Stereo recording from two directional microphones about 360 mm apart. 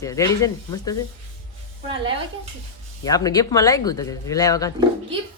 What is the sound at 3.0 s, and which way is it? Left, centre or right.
Speech, centre.